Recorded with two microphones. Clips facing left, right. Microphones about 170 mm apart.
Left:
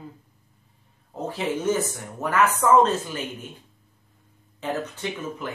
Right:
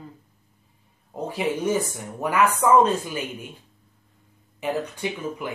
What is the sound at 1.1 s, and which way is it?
Speech, 10° right (ahead or behind).